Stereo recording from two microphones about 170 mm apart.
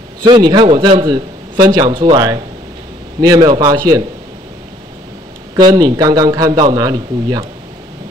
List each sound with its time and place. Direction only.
0.2 s a man's voice: 25° right (ahead or behind)
5.6 s a man's voice: 25° right (ahead or behind)